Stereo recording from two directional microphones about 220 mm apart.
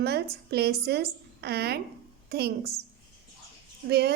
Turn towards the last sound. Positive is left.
turn(degrees=-45)  # may be behind; listen again after turning